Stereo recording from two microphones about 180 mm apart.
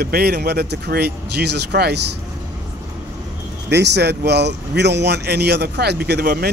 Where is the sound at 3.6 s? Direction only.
70° right (ahead or behind).